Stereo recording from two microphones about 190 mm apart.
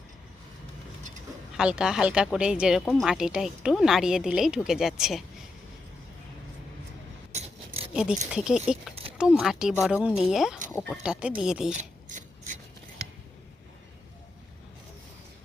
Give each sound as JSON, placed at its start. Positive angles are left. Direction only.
{"t": 1.5, "sound": "speech", "side_deg": -5}
{"t": 8.3, "sound": "speech", "side_deg": -5}
{"t": 10.7, "sound": "speech", "side_deg": 10}
{"t": 11.0, "sound": "speech", "side_deg": -5}
{"t": 11.8, "sound": "filing", "side_deg": -40}